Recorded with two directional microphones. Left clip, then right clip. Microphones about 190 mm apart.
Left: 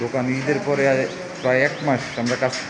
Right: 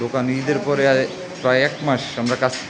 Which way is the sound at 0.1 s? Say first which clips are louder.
Right 1 dB; 15° right (ahead or behind).